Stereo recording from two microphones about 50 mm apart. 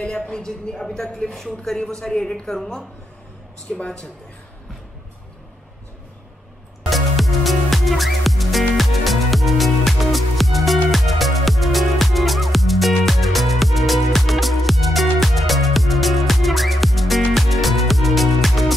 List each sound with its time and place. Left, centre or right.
0.0 s speech: centre
6.9 s music: centre